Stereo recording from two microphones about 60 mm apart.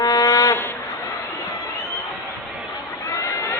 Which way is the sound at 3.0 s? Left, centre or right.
Left.